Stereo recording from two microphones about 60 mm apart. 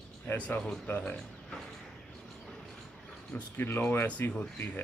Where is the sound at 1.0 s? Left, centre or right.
Centre.